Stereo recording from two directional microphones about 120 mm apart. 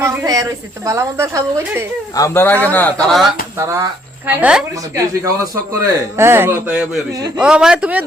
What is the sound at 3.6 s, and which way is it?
Speech, 25° right (ahead or behind).